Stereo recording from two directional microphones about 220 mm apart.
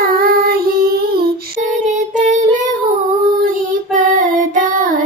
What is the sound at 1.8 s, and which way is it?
Child singing, 35° right (ahead or behind).